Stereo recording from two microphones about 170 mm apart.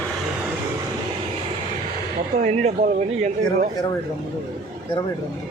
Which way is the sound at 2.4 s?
50° right (ahead or behind).